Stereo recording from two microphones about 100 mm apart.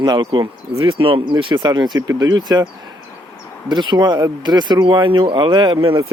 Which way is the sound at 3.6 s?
50° right (ahead or behind).